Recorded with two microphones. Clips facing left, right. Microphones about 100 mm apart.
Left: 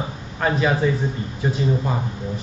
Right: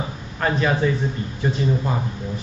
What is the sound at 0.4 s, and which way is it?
A man's voice, 5° left (ahead or behind).